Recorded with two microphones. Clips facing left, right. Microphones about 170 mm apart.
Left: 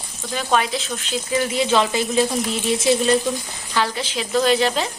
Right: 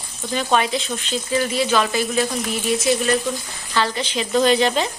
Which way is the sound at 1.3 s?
20° left (ahead or behind).